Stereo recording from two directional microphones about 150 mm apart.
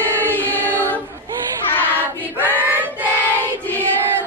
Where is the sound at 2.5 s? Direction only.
10° right (ahead or behind).